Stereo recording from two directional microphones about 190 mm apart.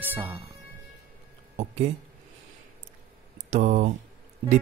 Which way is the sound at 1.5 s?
35° right (ahead or behind).